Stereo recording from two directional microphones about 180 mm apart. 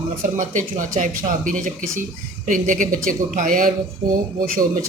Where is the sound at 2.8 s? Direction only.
45° right (ahead or behind).